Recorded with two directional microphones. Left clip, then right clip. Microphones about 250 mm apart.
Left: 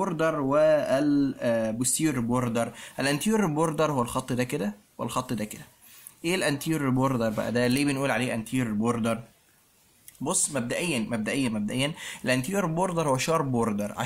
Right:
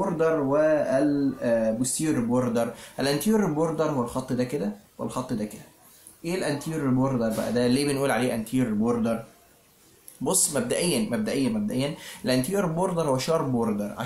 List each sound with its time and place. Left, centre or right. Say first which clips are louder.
0.2 s speech: right 1 dB; left
10.2 s speech: right 3 dB; left